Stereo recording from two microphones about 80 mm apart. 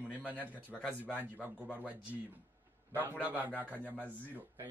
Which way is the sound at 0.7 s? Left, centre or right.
Centre.